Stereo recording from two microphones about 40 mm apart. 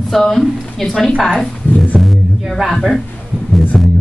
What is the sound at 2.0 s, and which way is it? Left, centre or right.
Music, centre.